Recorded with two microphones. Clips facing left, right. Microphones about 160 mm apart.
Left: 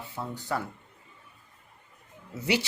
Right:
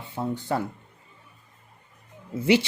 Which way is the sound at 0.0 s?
20° right (ahead or behind).